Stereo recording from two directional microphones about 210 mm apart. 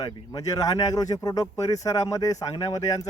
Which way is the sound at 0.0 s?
20° left (ahead or behind).